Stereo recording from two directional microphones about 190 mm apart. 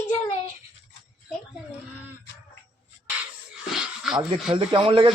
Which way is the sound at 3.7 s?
Centre (ahead or behind).